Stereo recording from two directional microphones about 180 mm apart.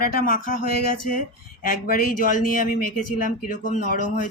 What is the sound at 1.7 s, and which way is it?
Speech, 50° left (ahead or behind).